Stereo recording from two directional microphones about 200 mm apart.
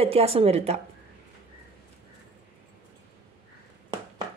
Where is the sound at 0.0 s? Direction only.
30° right (ahead or behind).